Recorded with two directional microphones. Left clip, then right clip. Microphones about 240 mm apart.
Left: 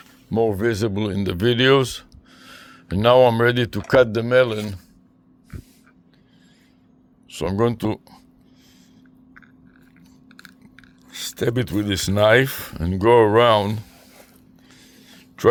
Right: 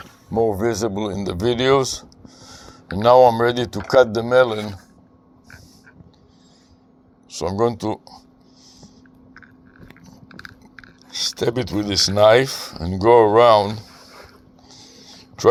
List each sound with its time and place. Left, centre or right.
0.3 s speech: left
7.3 s speech: left
11.1 s speech: left
14.7 s a sound: left